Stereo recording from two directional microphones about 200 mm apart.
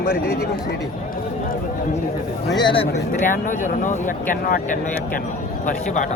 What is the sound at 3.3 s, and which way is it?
Speech, 40° left (ahead or behind).